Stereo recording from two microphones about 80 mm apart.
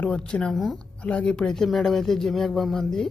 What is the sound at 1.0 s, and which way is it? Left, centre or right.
Speech, centre.